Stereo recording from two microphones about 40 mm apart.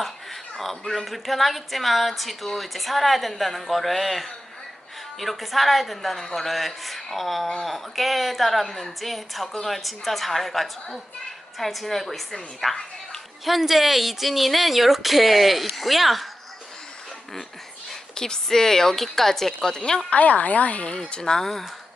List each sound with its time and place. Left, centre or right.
0.6 s a woman's voice: centre
18.1 s a woman's voice: centre
20.1 s a woman's voice: left
20.8 s a woman's voice: left; by 21.7 s centre